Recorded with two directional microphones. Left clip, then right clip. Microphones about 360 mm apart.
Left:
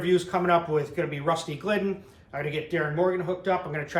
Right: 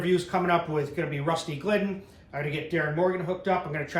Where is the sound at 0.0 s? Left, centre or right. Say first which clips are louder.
Left 1 dB; centre.